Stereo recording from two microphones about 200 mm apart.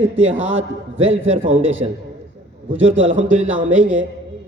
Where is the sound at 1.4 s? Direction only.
75° right (ahead or behind).